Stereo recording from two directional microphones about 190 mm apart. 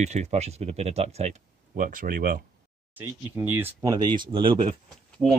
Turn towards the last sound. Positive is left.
turn(degrees=-25)  # may be behind; listen again after turning